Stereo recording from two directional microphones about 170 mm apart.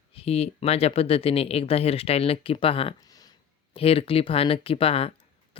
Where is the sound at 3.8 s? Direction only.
35° left (ahead or behind).